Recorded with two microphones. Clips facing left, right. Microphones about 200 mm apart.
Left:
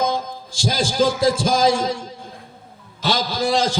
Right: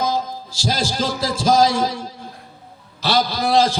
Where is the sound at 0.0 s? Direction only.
55° left (ahead or behind).